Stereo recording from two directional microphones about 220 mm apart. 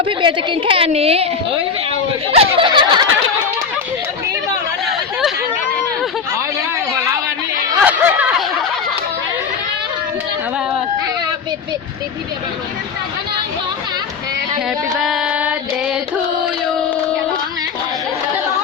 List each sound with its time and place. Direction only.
0.0 s a woman's voice: 20° right (ahead or behind)
2.4 s a woman's voice: 20° right (ahead or behind)
7.8 s chatter: 5° right (ahead or behind)
14.9 s child singing: centre (ahead or behind)